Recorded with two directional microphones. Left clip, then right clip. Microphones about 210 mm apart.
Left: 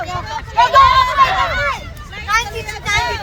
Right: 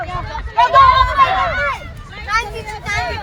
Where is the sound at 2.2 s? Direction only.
25° left (ahead or behind).